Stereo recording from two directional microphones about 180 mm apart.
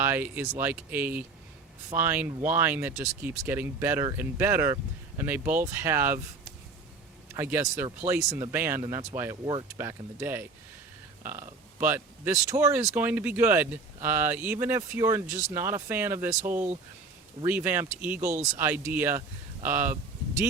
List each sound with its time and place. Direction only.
0.0 s speech: 10° right (ahead or behind)
7.3 s speech: 15° right (ahead or behind)
9.3 s speech: 30° right (ahead or behind)
9.7 s speech: 10° right (ahead or behind)